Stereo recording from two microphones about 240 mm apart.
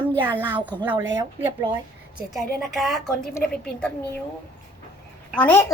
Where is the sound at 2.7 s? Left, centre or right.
Centre.